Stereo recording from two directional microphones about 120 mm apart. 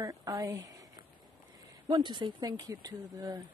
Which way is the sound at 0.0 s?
30° right (ahead or behind).